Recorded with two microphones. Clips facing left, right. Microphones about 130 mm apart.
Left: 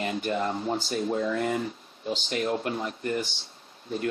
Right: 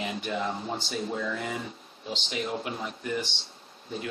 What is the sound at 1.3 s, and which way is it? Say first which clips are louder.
Speech: left 6 dB; 55° left (ahead or behind).